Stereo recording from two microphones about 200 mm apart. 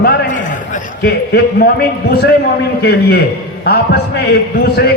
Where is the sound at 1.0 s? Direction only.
55° left (ahead or behind).